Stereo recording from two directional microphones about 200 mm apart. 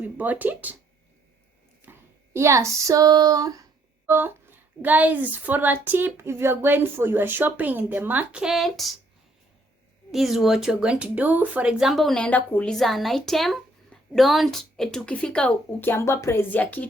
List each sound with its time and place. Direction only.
0.0 s a woman's voice: 10° right (ahead or behind)
1.8 s a woman's voice: 10° right (ahead or behind)
10.1 s speech: centre (ahead or behind)